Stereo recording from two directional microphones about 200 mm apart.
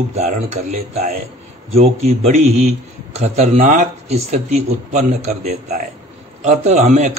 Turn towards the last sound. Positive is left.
turn(degrees=-35)  # may be behind; listen again after turning